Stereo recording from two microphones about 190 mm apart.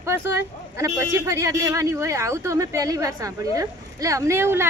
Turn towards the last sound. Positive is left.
turn(degrees=-15)  # may be behind; listen again after turning